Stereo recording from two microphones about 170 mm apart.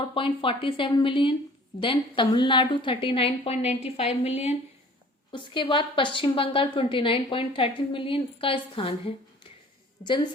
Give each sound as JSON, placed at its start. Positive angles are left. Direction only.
{"t": 0.0, "sound": "a woman's voice", "side_deg": 30}
{"t": 10.0, "sound": "a woman's voice", "side_deg": 45}